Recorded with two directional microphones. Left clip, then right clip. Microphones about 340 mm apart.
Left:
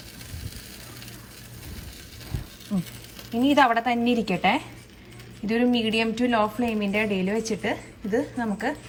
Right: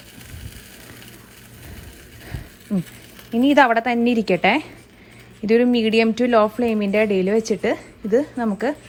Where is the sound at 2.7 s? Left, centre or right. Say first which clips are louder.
Right 5 dB; right.